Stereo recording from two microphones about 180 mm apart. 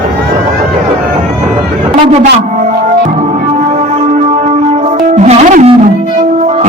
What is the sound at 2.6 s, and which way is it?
Music, 40° right (ahead or behind).